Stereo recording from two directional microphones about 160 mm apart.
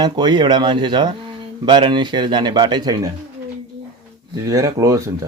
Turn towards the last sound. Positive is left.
turn(degrees=-20)  # may be behind; listen again after turning